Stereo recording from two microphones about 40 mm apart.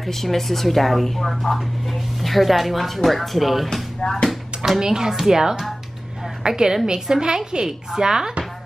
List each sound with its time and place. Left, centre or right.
0.0 s speech: centre
4.0 s speech: centre
4.7 s speech: centre